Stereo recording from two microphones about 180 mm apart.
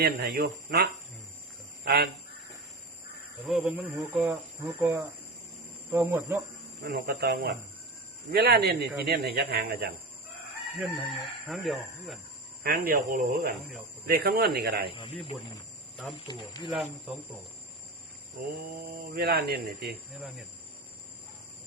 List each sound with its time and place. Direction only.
0.0 s speech: 60° right (ahead or behind)
3.4 s speech: 5° right (ahead or behind)
6.8 s speech: 60° right (ahead or behind)
10.8 s chicken: centre (ahead or behind)
12.6 s speech: 55° right (ahead or behind)
16.2 s speech: 25° left (ahead or behind)
18.9 s speech: 60° right (ahead or behind)